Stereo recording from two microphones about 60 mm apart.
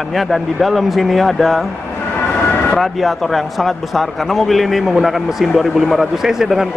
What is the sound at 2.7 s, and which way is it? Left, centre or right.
Speech, centre.